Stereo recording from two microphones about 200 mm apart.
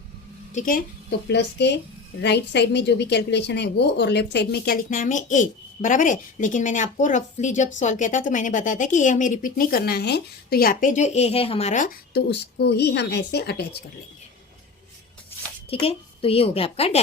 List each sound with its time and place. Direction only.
0.5 s a woman's voice: 40° left (ahead or behind)
1.3 s a woman's voice: 60° left (ahead or behind)
15.7 s a woman's voice: 30° left (ahead or behind)